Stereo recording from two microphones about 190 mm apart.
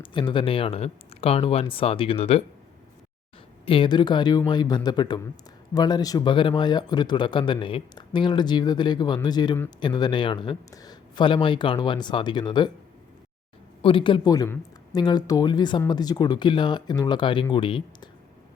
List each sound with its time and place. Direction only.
0.0 s speech: 25° left (ahead or behind)
3.7 s speech: 25° left (ahead or behind)
13.8 s speech: 25° left (ahead or behind)